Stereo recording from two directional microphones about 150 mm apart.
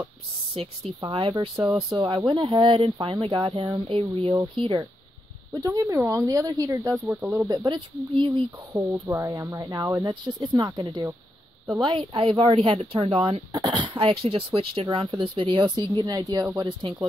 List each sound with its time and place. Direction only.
0.6 s speech: 35° right (ahead or behind)
5.5 s speech: 20° right (ahead or behind)
7.1 s speech: 10° right (ahead or behind)
7.4 s speech: 30° right (ahead or behind)